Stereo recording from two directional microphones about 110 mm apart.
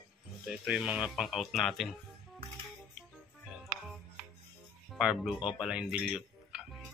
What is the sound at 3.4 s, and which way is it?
Music, centre (ahead or behind).